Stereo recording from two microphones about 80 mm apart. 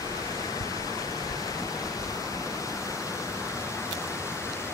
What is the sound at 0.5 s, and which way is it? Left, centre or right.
Waterfall, left.